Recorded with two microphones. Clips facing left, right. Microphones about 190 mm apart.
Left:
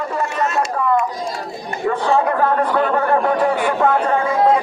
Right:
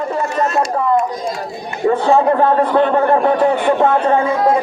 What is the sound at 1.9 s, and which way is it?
A man's voice, 30° right (ahead or behind).